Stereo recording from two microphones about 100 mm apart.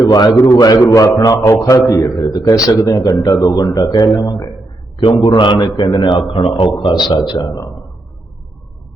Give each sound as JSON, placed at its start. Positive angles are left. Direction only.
{"t": 0.0, "sound": "a man's voice", "side_deg": 40}
{"t": 4.9, "sound": "a man's voice", "side_deg": 60}
{"t": 5.7, "sound": "a man's voice", "side_deg": 40}